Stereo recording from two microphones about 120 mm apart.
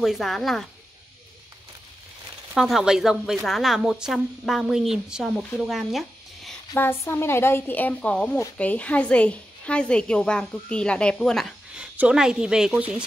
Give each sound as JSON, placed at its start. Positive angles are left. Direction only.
{"t": 0.0, "sound": "speech", "side_deg": 0}
{"t": 2.5, "sound": "speech", "side_deg": 0}
{"t": 5.6, "sound": "a sound", "side_deg": 0}
{"t": 6.8, "sound": "a woman's voice", "side_deg": 20}
{"t": 11.7, "sound": "a woman's voice", "side_deg": -10}